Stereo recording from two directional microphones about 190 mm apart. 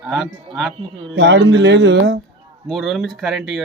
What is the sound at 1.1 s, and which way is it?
Speech, 70° right (ahead or behind).